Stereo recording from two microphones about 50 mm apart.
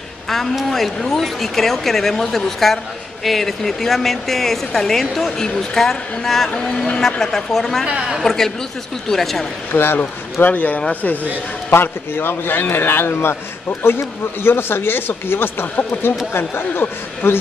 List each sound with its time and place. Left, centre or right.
0.6 s speech: centre
7.8 s a woman's voice: centre
8.2 s speech: centre
9.7 s a man's voice: left
10.4 s speech: left
11.7 s a man's voice: left